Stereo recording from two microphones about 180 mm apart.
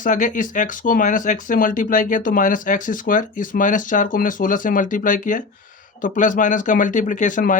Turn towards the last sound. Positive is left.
turn(degrees=45)  # may be behind; listen again after turning